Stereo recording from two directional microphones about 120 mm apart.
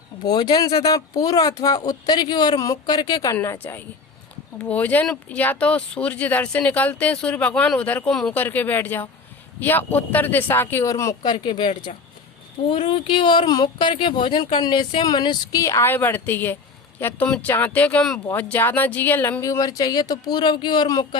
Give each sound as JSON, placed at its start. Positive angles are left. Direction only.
{"t": 0.3, "sound": "speech", "side_deg": 35}
{"t": 3.3, "sound": "a woman's voice", "side_deg": 15}
{"t": 8.4, "sound": "speech", "side_deg": 15}
{"t": 11.2, "sound": "speech", "side_deg": 40}
{"t": 15.6, "sound": "speech", "side_deg": 20}
{"t": 19.4, "sound": "speech", "side_deg": 30}